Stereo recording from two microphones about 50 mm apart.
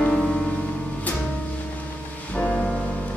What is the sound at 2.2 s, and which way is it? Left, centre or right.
Music, left.